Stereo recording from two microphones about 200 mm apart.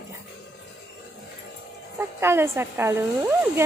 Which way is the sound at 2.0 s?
10° right (ahead or behind).